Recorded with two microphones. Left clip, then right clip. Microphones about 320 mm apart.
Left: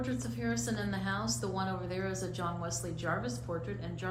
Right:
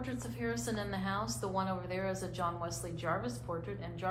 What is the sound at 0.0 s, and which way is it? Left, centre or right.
A woman's voice, right.